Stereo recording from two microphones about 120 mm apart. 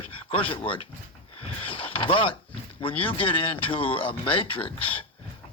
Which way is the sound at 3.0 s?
50° left (ahead or behind).